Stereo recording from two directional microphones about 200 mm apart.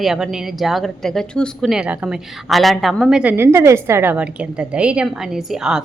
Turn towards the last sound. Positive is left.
turn(degrees=-5)  # may be behind; listen again after turning